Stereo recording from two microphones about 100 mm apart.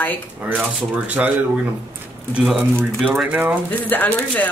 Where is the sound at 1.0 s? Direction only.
15° right (ahead or behind).